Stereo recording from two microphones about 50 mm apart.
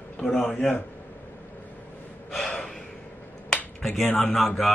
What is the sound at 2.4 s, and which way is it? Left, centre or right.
Gasp, centre.